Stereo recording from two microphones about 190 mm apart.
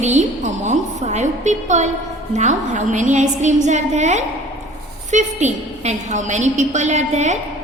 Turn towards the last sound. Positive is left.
turn(degrees=-40)  # may be behind; listen again after turning